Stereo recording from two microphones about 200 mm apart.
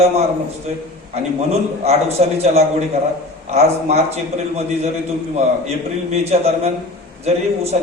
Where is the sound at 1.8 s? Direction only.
30° right (ahead or behind).